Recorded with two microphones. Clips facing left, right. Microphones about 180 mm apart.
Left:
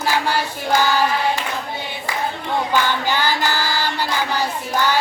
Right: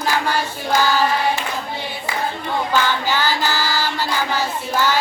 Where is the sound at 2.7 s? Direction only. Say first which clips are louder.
Right 1 dB; 15° left (ahead or behind).